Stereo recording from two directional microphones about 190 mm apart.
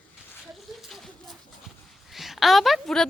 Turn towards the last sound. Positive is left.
turn(degrees=0)  # may be behind; listen again after turning